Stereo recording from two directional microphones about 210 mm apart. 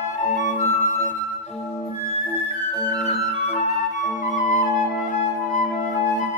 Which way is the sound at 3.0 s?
30° left (ahead or behind).